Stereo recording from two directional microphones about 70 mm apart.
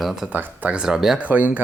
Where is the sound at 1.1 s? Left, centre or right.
Right.